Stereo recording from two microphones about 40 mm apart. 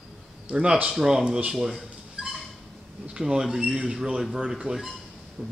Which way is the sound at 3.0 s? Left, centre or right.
Centre.